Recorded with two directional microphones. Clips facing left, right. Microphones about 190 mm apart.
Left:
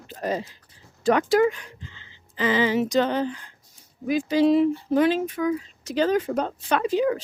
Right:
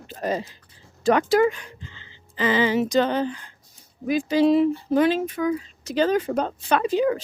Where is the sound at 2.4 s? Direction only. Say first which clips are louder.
Right 1 dB; 30° right (ahead or behind).